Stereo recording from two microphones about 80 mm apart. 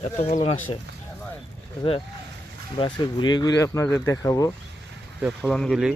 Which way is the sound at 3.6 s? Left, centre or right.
Left.